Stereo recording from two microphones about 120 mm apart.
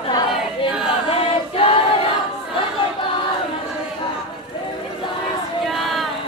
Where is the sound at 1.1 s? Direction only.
50° left (ahead or behind).